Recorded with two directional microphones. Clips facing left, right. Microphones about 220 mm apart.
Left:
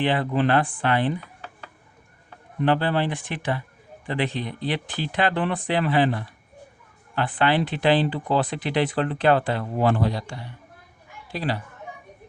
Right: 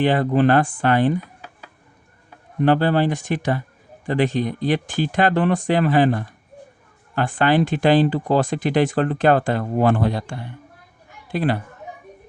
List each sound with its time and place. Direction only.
0.0 s speech: 45° right (ahead or behind)
2.6 s speech: 45° right (ahead or behind)